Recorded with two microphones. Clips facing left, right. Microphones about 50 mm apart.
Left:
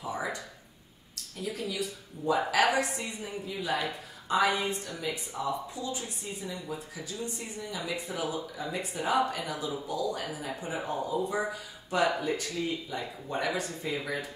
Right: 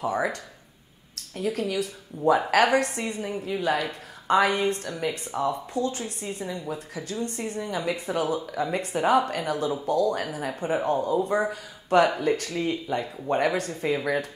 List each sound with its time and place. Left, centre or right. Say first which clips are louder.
0.0 s speech: right 7 dB; right